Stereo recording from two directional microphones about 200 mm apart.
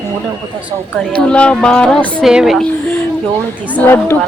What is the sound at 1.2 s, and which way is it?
A woman's voice, 5° left (ahead or behind).